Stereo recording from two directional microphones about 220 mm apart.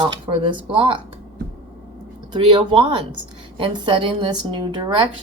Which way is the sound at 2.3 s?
20° right (ahead or behind).